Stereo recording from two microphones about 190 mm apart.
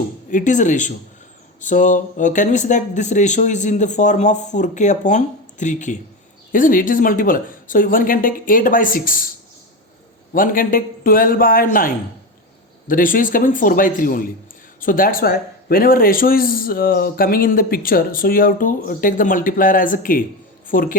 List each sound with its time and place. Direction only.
0.3 s speech: 40° left (ahead or behind)
10.3 s speech: 45° left (ahead or behind)
12.9 s speech: 45° left (ahead or behind)